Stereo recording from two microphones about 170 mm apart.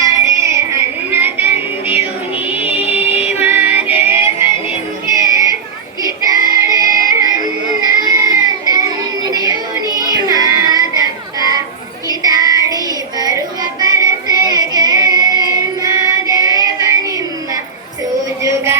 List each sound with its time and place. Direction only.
0.0 s child singing: 15° right (ahead or behind)
2.5 s music: 10° right (ahead or behind)
5.2 s a sound: 20° right (ahead or behind)
6.7 s music: 20° right (ahead or behind)
12.0 s child singing: 20° right (ahead or behind)
18.4 s a sound: 15° right (ahead or behind)